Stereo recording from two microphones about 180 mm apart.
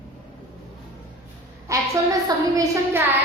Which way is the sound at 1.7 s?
20° right (ahead or behind).